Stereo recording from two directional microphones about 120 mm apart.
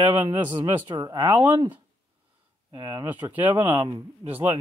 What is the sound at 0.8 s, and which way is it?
Speech, 35° right (ahead or behind).